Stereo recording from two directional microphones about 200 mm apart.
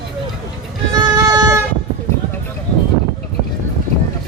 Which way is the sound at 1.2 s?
15° right (ahead or behind).